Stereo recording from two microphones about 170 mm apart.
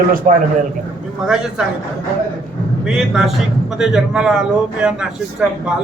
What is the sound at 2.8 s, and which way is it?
A man's voice, 5° right (ahead or behind).